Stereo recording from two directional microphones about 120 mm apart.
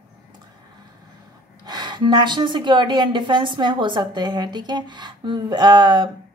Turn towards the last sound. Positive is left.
turn(degrees=-40)  # may be behind; listen again after turning